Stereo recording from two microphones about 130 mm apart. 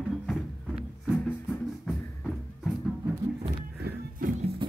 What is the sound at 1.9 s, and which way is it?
Music, centre (ahead or behind).